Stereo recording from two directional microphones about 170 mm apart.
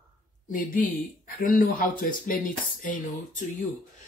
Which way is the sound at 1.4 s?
55° left (ahead or behind).